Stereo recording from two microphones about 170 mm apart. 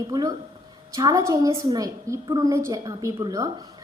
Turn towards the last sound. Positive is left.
turn(degrees=-20)  # may be behind; listen again after turning